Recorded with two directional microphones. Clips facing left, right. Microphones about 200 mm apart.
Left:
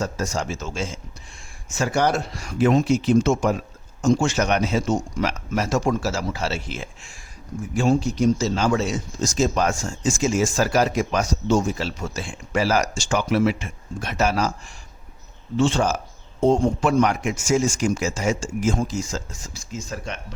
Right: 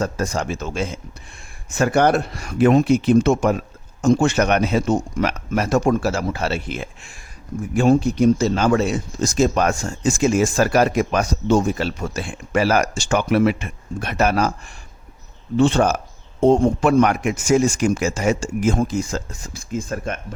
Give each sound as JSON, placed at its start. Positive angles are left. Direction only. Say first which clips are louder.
{"t": 0.0, "sound": "speech", "louder": "right 3 dB", "side_deg": -60}
{"t": 15.5, "sound": "speech", "louder": "right 4 dB", "side_deg": -60}